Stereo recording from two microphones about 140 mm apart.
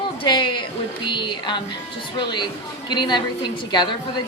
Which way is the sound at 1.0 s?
35° left (ahead or behind).